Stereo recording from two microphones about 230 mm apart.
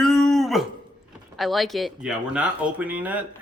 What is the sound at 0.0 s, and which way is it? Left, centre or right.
Dog, centre.